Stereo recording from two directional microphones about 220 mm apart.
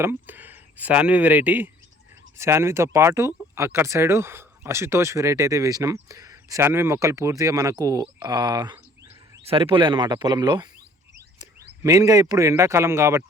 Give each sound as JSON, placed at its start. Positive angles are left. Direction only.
{"t": 0.0, "sound": "speech", "side_deg": -10}
{"t": 9.4, "sound": "speech", "side_deg": -25}
{"t": 11.8, "sound": "speech", "side_deg": -15}